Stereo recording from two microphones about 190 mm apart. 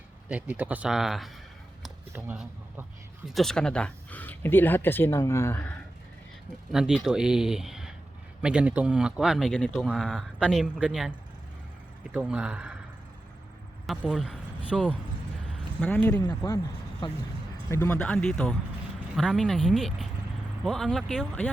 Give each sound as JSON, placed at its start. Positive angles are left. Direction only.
{"t": 0.3, "sound": "speech", "side_deg": -10}
{"t": 6.7, "sound": "speech", "side_deg": -5}
{"t": 12.1, "sound": "speech", "side_deg": -5}
{"t": 13.8, "sound": "speech", "side_deg": -5}
{"t": 15.4, "sound": "a sound", "side_deg": 5}
{"t": 16.2, "sound": "speech", "side_deg": 20}